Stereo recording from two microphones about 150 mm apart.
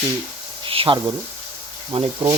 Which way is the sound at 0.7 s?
35° right (ahead or behind).